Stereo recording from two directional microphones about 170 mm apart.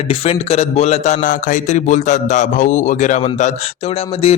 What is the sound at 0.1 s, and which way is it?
A man's voice, 35° left (ahead or behind).